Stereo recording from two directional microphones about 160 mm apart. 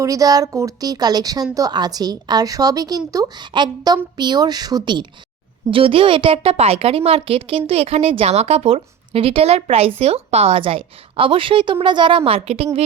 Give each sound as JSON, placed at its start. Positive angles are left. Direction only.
{"t": 0.0, "sound": "a woman's voice", "side_deg": -20}